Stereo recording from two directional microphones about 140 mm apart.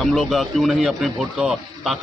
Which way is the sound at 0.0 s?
Centre (ahead or behind).